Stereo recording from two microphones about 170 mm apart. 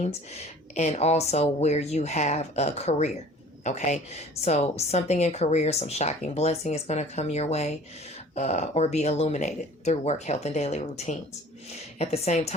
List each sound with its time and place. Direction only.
0.0 s a woman's voice: 40° left (ahead or behind)